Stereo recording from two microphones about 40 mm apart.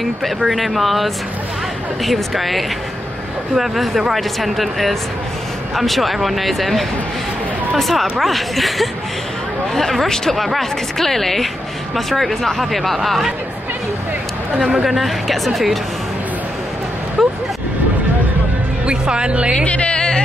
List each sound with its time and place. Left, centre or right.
0.5 s speech: centre
10.3 s speech: centre
14.7 s speech: centre
17.2 s a sound: centre
18.9 s speech: right
19.6 s music: left